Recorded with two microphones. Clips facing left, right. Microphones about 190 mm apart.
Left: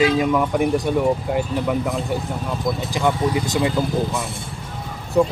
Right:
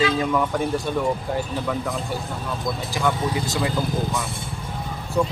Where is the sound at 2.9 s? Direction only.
20° left (ahead or behind).